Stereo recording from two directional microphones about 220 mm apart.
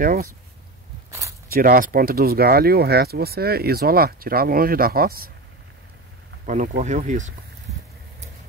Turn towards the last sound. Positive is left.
turn(degrees=-35)  # may be behind; listen again after turning